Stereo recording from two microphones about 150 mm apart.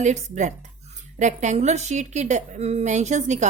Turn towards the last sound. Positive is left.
turn(degrees=-50)  # may be behind; listen again after turning